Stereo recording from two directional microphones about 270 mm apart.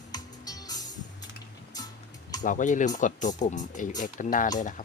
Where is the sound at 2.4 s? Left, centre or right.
Left.